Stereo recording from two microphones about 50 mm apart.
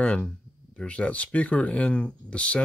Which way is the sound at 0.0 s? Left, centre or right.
Left.